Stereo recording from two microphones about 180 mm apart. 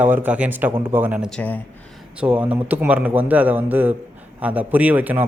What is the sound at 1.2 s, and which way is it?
Speech, 5° left (ahead or behind).